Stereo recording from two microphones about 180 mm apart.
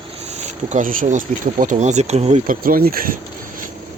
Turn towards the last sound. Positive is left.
turn(degrees=-55)  # may be behind; listen again after turning